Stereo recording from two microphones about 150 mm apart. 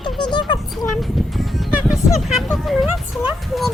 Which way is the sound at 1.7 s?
5° right (ahead or behind).